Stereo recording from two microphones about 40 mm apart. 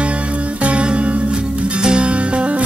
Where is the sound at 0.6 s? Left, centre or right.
Right.